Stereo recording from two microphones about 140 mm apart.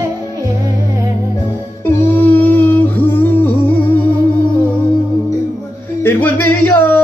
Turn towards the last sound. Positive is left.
turn(degrees=10)  # may be behind; listen again after turning